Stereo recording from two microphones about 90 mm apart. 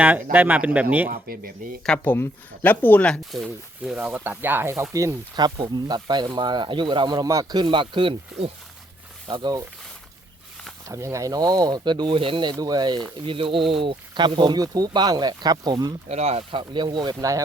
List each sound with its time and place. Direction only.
0.0 s speech: 20° right (ahead or behind)
2.0 s speech: 20° left (ahead or behind)
3.3 s speech: centre (ahead or behind)
3.9 s speech: 15° right (ahead or behind); by 5.1 s 30° right (ahead or behind)
5.4 s speech: 55° right (ahead or behind)
7.3 s speech: 40° right (ahead or behind)
7.6 s speech: 65° right (ahead or behind)
9.2 s speech: 55° right (ahead or behind)
10.8 s speech: 35° right (ahead or behind)
13.2 s speech: 75° right (ahead or behind); by 16.0 s 50° right (ahead or behind)
16.5 s speech: 60° right (ahead or behind); by 17.4 s 40° right (ahead or behind)